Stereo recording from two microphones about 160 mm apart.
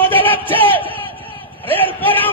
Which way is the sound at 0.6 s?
35° left (ahead or behind).